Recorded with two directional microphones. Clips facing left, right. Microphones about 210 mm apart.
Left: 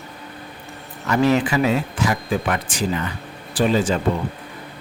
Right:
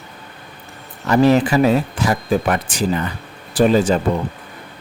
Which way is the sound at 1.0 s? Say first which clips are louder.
Right 4 dB; 35° right (ahead or behind).